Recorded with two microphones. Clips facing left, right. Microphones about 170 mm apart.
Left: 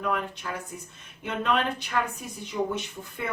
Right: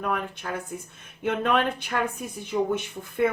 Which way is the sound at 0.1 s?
55° right (ahead or behind).